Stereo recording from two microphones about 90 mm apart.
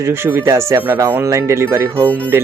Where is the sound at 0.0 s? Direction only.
25° right (ahead or behind).